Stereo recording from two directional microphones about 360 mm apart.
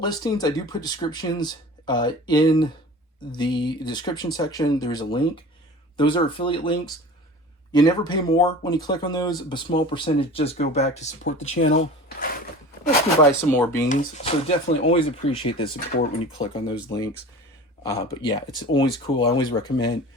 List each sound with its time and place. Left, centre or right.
0.0 s speech: centre
11.2 s speech: left
13.4 s speech: centre
13.8 s speech: left
17.8 s speech: centre